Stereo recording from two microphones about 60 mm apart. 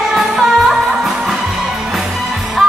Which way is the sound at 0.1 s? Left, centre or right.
Centre.